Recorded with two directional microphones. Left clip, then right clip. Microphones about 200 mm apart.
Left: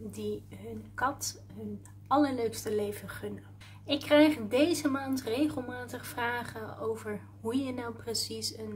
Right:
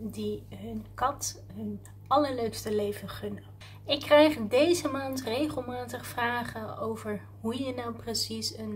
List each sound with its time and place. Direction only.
0.2 s a woman's voice: 5° left (ahead or behind)